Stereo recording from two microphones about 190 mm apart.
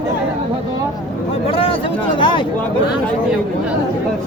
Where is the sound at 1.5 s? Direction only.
30° left (ahead or behind).